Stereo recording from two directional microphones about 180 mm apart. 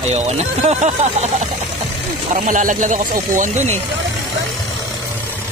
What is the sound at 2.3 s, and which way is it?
Speech, 45° right (ahead or behind).